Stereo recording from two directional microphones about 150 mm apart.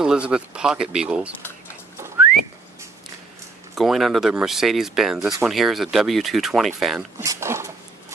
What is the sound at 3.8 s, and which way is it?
Speech, centre (ahead or behind).